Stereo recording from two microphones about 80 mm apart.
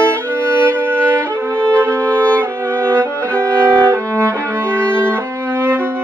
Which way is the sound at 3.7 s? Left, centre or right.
Centre.